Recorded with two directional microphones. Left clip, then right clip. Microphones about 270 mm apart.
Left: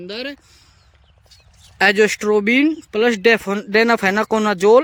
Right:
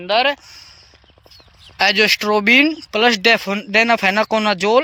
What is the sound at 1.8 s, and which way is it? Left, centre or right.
Speech, centre.